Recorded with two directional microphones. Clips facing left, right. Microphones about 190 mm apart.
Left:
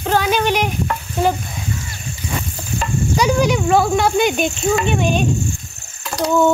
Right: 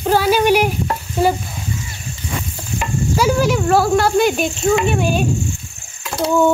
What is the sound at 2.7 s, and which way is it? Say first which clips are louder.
Sizzle: even; 5° right (ahead or behind).